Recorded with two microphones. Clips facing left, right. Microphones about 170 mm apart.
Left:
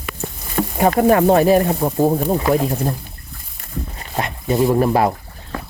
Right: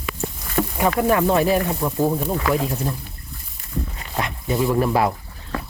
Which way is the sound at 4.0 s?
45° left (ahead or behind).